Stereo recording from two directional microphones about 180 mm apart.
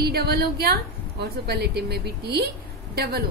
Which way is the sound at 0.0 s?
60° right (ahead or behind).